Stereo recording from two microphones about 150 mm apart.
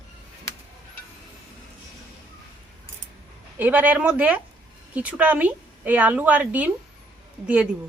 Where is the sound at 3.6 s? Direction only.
10° right (ahead or behind).